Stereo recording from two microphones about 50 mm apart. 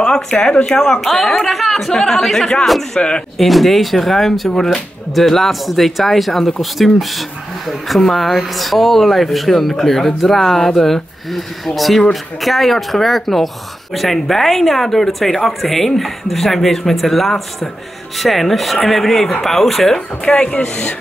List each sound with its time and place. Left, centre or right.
0.1 s speech: centre